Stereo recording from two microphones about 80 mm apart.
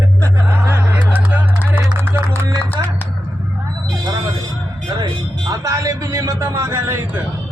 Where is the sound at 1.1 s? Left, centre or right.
Centre.